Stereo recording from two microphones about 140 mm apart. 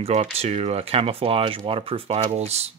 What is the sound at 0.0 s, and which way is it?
Speech, 50° right (ahead or behind).